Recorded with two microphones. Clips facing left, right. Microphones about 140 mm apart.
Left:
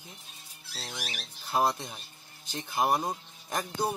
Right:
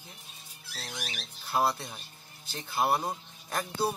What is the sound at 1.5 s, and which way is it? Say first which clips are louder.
Speech: left 1 dB; 20° left (ahead or behind).